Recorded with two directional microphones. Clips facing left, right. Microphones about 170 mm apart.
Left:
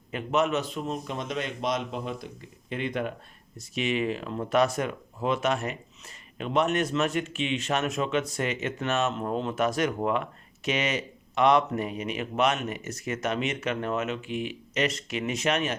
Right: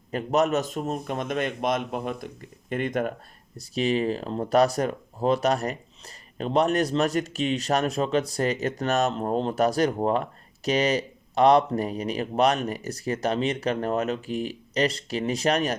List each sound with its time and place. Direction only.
0.1 s a man's voice: 40° right (ahead or behind)
3.6 s speech: 35° right (ahead or behind)